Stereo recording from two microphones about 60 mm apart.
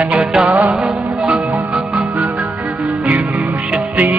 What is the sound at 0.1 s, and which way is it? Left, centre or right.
Music, centre.